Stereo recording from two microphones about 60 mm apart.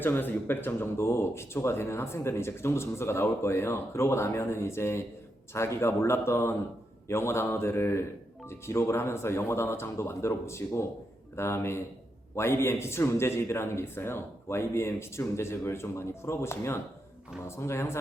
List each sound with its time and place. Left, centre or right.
0.0 s speech: left